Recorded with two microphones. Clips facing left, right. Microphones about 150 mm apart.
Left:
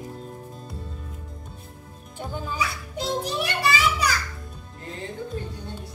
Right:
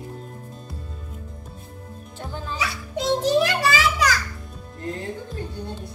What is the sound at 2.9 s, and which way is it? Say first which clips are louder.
Music: right 10 dB; 90° right.